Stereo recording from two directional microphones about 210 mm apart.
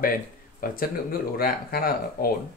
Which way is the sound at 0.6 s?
45° left (ahead or behind).